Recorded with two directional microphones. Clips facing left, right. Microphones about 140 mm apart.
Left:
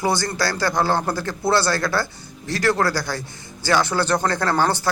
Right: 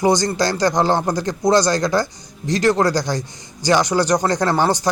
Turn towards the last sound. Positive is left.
turn(degrees=-15)  # may be behind; listen again after turning